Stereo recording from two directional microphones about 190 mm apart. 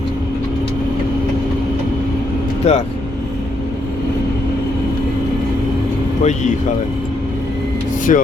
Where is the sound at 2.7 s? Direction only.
35° left (ahead or behind).